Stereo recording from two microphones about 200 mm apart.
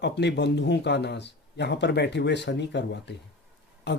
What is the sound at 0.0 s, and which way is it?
Speech, 60° left (ahead or behind).